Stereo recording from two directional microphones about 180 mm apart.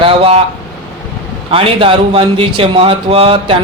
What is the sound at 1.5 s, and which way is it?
Speech, 30° right (ahead or behind).